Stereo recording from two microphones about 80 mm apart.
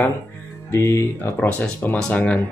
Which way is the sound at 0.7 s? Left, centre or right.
Left.